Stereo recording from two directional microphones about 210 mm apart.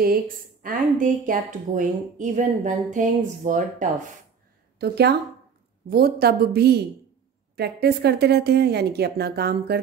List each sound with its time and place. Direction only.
0.0 s a woman's voice: 45° right (ahead or behind)
4.7 s a woman's voice: 50° right (ahead or behind)